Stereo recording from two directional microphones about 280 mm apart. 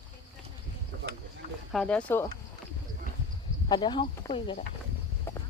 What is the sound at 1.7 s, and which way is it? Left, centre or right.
Speech, centre.